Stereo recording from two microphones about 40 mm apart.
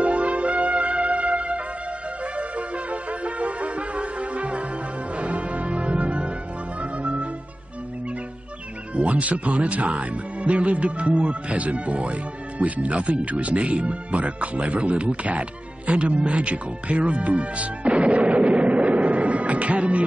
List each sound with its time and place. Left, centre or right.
0.0 s music: right
8.9 s speech: right
15.9 s music: right